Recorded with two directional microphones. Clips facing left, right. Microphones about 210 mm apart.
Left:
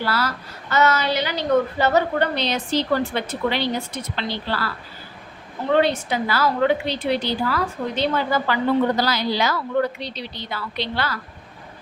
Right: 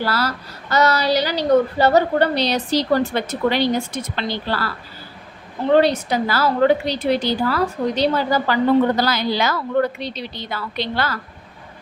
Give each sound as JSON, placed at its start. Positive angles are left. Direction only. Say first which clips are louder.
{"t": 0.0, "sound": "a woman's voice", "louder": "right 2 dB", "side_deg": -40}
{"t": 9.0, "sound": "a woman's voice", "louder": "right 2 dB", "side_deg": -50}